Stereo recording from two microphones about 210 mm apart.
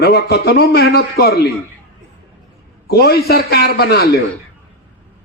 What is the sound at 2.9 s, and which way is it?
A man's voice, 50° left (ahead or behind).